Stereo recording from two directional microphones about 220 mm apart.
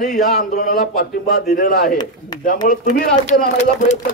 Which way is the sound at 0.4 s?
35° left (ahead or behind).